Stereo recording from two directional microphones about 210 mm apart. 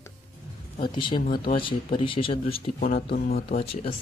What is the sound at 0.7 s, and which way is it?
Speech, 20° left (ahead or behind).